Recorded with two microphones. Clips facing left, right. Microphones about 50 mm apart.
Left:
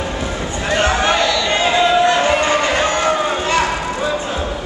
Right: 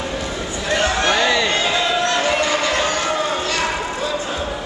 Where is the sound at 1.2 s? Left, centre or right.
Right.